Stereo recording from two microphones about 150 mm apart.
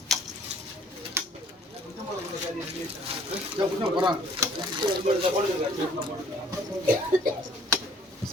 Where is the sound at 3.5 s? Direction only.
35° right (ahead or behind).